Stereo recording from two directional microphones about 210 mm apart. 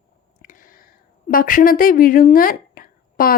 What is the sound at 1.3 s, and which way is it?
Speech, 40° left (ahead or behind).